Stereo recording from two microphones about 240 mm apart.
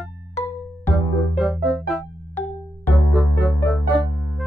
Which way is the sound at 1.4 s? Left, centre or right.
Centre.